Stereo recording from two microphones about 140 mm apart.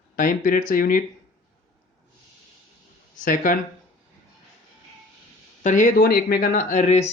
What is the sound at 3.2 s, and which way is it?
Speech, 75° left (ahead or behind).